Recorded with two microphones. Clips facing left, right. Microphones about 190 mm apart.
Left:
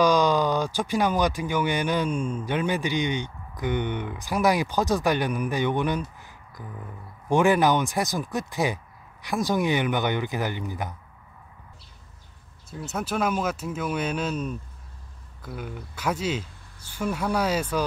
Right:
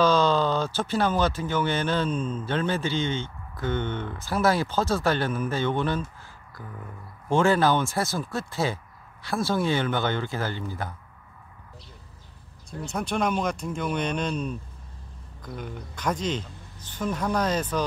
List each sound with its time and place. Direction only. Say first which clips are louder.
0.0 s speech: left 1 dB; 15° left (ahead or behind)
12.8 s speech: even; 5° left (ahead or behind)